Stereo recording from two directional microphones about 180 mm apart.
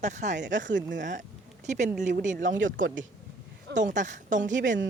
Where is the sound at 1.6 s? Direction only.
40° right (ahead or behind).